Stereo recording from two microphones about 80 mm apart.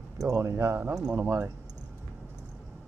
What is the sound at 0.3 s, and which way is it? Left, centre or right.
Speech, right.